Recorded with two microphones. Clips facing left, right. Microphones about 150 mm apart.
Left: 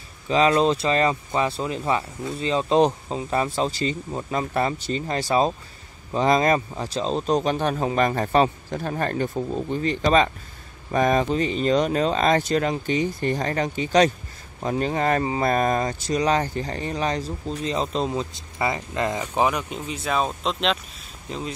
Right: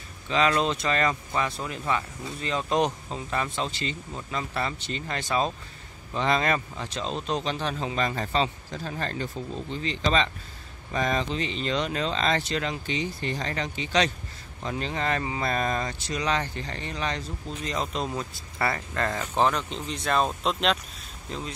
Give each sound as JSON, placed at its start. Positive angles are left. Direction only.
{"t": 0.3, "sound": "speech", "side_deg": 35}